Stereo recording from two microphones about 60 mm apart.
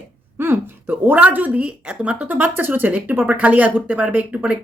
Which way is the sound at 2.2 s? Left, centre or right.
Right.